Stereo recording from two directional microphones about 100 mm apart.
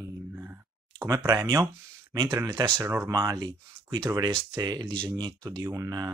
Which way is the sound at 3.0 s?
40° right (ahead or behind).